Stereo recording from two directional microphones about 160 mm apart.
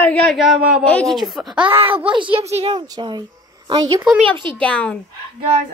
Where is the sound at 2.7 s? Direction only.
25° right (ahead or behind).